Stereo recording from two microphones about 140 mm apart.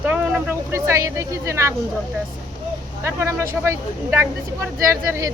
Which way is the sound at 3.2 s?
20° right (ahead or behind).